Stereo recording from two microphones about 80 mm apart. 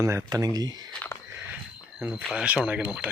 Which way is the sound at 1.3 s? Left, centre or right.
Right.